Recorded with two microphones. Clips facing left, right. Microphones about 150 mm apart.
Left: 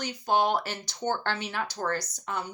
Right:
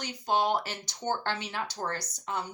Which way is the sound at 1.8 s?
55° left (ahead or behind).